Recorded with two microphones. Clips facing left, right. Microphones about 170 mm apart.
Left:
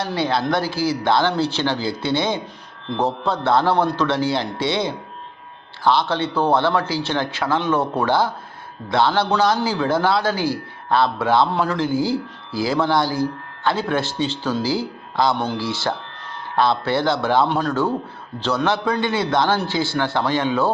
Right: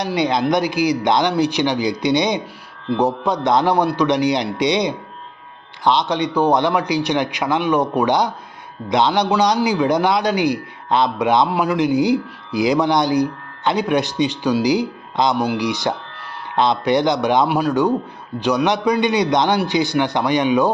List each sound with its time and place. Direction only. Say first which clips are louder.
0.0 s a man's voice: right 3 dB; 15° right (ahead or behind)